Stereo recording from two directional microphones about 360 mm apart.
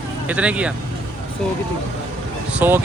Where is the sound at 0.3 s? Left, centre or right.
Centre.